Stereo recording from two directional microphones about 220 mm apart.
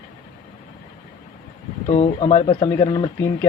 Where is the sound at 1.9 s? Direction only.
30° left (ahead or behind).